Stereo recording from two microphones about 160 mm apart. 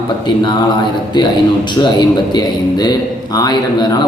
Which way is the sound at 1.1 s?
30° left (ahead or behind).